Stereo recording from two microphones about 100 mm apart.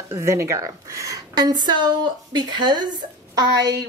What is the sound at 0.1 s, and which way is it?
A woman's voice, 30° right (ahead or behind).